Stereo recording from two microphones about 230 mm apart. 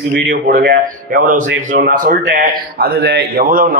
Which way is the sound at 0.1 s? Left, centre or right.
Right.